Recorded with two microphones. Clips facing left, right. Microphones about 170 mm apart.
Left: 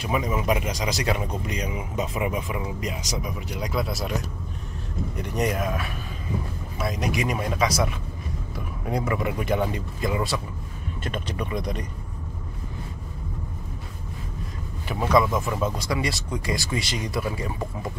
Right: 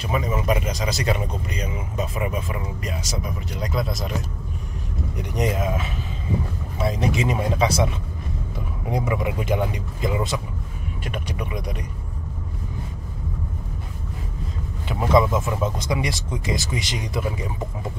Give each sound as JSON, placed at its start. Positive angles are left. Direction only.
{"t": 0.0, "sound": "speech", "side_deg": 10}
{"t": 5.1, "sound": "speech", "side_deg": -20}
{"t": 8.8, "sound": "speech", "side_deg": -15}
{"t": 14.9, "sound": "speech", "side_deg": -20}